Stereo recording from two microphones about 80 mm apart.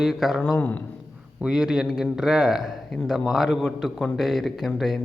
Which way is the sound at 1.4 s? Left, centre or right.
Centre.